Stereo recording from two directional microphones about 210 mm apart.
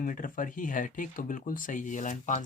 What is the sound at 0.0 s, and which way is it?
Speech, 40° left (ahead or behind).